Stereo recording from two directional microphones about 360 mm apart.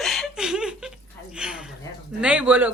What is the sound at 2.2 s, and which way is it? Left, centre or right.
Speech, centre.